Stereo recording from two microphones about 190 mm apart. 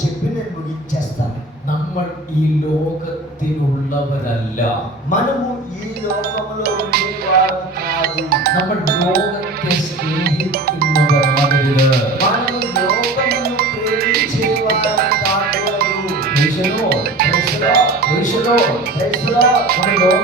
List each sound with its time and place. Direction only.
5.1 s a man's voice: 40° left (ahead or behind)
6.2 s music: 55° right (ahead or behind)
18.5 s speech: 55° right (ahead or behind)